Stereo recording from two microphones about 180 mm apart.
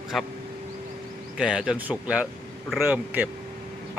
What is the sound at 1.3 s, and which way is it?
Speech, 5° right (ahead or behind).